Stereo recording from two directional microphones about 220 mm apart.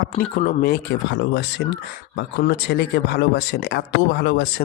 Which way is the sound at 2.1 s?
45° left (ahead or behind).